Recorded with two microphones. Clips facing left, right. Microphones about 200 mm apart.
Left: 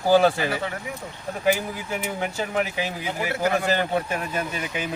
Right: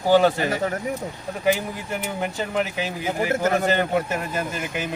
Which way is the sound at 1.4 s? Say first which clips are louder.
Right 1 dB; centre (ahead or behind).